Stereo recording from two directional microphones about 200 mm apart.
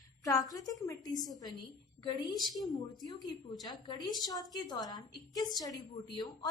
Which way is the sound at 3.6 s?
20° left (ahead or behind).